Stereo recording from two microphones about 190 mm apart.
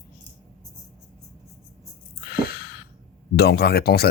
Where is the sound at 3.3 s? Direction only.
55° left (ahead or behind).